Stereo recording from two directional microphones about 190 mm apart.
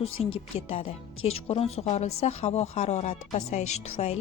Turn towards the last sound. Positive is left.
turn(degrees=35)  # may be behind; listen again after turning